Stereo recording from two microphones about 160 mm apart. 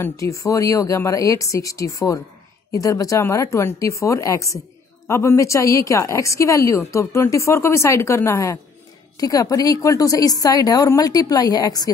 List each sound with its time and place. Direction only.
0.0 s speech: 20° left (ahead or behind)